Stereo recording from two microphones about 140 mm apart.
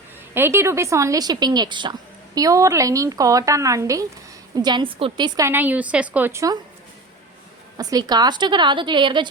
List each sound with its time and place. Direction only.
0.3 s a woman's voice: 15° right (ahead or behind)
5.5 s a woman's voice: 10° right (ahead or behind)
7.8 s a woman's voice: 25° right (ahead or behind)